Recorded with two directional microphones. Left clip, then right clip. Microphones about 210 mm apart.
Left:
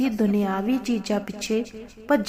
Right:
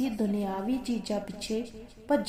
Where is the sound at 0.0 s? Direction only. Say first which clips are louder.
Left 7 dB; 15° left (ahead or behind).